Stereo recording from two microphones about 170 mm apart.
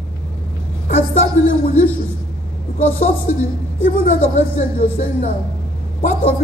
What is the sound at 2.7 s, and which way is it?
Speech, 50° left (ahead or behind).